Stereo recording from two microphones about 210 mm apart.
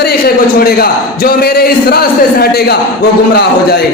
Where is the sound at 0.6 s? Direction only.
45° left (ahead or behind).